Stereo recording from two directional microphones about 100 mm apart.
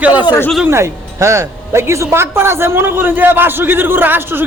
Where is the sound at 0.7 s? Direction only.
30° right (ahead or behind).